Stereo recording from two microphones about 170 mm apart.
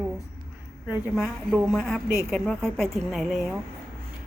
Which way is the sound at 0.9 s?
5° right (ahead or behind).